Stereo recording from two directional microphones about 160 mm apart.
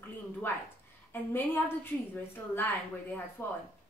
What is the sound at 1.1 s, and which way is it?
Speech, 15° left (ahead or behind).